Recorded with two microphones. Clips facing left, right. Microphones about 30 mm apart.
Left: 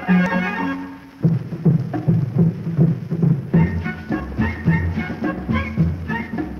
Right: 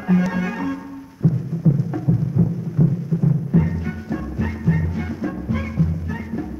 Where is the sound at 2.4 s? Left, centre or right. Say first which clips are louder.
Left 3 dB; left.